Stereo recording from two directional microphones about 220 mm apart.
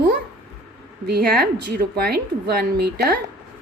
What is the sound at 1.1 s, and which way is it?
Speech, 45° right (ahead or behind).